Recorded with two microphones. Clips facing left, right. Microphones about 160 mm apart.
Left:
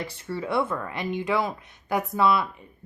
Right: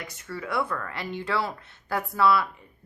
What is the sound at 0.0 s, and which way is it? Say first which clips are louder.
Speech: left 5 dB; 30° left (ahead or behind).